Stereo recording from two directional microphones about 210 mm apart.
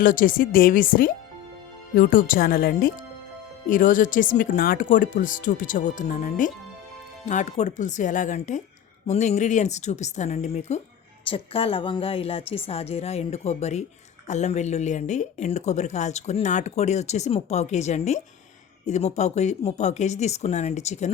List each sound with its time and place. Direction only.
0.0 s a woman's voice: 40° left (ahead or behind)